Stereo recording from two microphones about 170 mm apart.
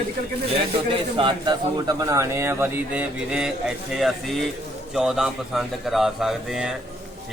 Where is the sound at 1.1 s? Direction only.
30° right (ahead or behind).